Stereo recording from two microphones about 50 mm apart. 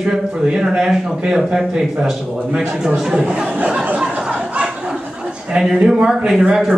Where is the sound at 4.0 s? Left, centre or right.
Centre.